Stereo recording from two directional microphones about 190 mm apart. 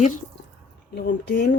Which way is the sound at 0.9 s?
60° left (ahead or behind).